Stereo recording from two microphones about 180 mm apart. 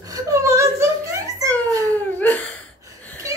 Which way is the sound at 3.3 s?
20° right (ahead or behind).